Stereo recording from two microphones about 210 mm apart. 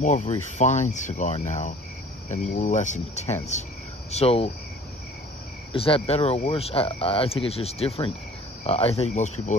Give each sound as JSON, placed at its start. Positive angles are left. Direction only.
{"t": 0.0, "sound": "cricket", "side_deg": 35}
{"t": 4.1, "sound": "speech", "side_deg": 30}
{"t": 5.7, "sound": "speech", "side_deg": 25}
{"t": 8.6, "sound": "cricket", "side_deg": 30}